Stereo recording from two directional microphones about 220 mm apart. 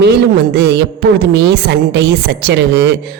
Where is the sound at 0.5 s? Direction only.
50° right (ahead or behind).